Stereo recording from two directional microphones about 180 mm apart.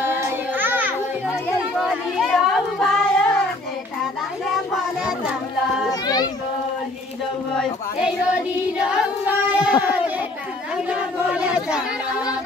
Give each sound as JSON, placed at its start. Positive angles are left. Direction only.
{"t": 0.0, "sound": "child singing", "side_deg": -10}
{"t": 2.1, "sound": "a sound", "side_deg": 0}
{"t": 4.5, "sound": "child singing", "side_deg": 0}
{"t": 5.9, "sound": "children playing", "side_deg": 20}
{"t": 7.5, "sound": "child singing", "side_deg": 0}
{"t": 9.8, "sound": "a sound", "side_deg": -10}